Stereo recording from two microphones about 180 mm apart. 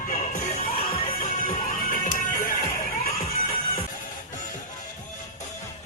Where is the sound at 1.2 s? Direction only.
50° left (ahead or behind).